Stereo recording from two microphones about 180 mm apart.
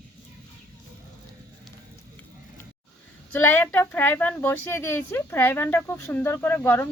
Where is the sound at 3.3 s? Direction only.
10° left (ahead or behind).